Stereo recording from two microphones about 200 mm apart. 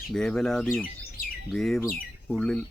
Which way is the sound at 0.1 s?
Centre (ahead or behind).